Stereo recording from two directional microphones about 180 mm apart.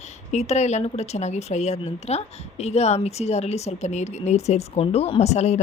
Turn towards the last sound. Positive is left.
turn(degrees=40)  # may be behind; listen again after turning